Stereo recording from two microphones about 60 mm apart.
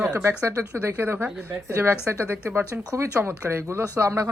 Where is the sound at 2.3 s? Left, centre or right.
Right.